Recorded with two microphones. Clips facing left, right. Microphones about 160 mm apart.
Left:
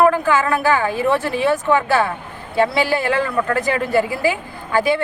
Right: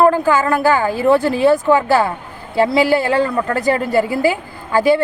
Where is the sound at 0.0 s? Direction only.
35° right (ahead or behind).